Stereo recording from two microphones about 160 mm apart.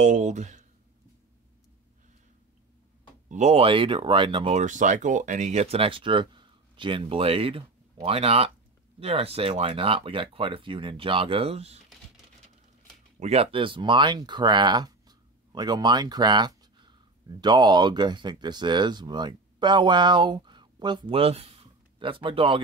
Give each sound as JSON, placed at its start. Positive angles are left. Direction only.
{"t": 0.0, "sound": "speech", "side_deg": -50}
{"t": 3.3, "sound": "speech", "side_deg": -45}
{"t": 4.6, "sound": "speech", "side_deg": -50}
{"t": 13.2, "sound": "speech", "side_deg": -40}